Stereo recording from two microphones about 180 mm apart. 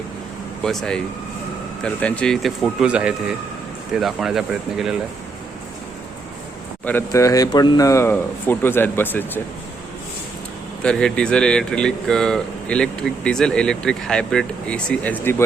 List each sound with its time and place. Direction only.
0.6 s speech: 5° left (ahead or behind)
6.8 s speech: 15° left (ahead or behind)
10.8 s speech: 5° left (ahead or behind)